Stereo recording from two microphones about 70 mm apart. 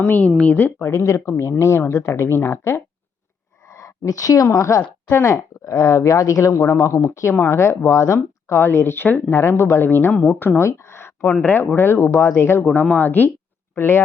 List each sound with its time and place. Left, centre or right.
0.0 s speech: left
0.8 s speech: left
3.7 s a sound: left
4.5 s speech: left
4.8 s speech: left
5.6 s speech: left
10.1 s a woman's voice: centre
10.6 s a sound: left
11.3 s speech: left